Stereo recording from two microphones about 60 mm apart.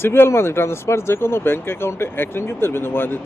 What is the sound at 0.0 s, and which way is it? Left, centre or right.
Speech, left.